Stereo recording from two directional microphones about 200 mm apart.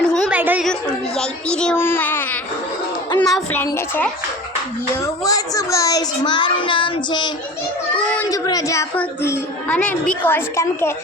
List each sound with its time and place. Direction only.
0.0 s music: 5° left (ahead or behind)
0.3 s music: 10° right (ahead or behind)
0.7 s a woman's voice: 5° left (ahead or behind); by 7.3 s 25° left (ahead or behind)
8.3 s a woman's voice: 20° left (ahead or behind)